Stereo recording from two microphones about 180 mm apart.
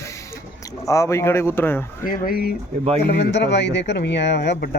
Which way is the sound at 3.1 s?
70° left (ahead or behind).